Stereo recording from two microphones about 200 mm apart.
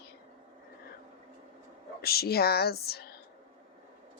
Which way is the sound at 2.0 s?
50° left (ahead or behind).